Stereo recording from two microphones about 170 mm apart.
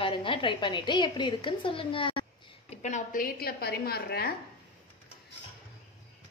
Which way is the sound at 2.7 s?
45° left (ahead or behind).